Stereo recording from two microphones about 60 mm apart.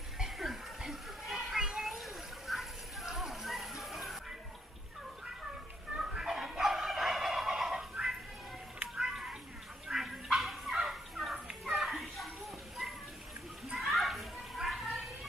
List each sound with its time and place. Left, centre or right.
0.4 s children playing: centre
5.9 s turkey: centre
8.9 s children playing: centre
9.8 s fowl: centre
13.7 s children playing: centre